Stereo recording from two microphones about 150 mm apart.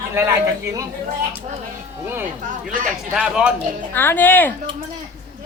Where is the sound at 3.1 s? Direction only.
5° right (ahead or behind).